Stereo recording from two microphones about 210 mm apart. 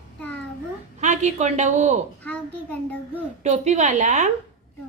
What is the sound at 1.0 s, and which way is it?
Speech, 35° right (ahead or behind).